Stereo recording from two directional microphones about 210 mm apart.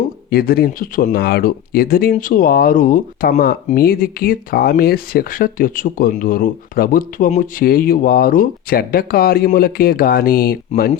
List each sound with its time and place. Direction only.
0.3 s speech: 45° left (ahead or behind)